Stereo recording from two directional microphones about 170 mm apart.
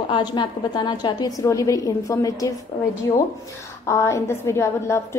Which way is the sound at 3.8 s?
15° left (ahead or behind).